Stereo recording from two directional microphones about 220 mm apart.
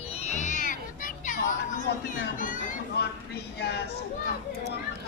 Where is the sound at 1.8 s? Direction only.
35° left (ahead or behind).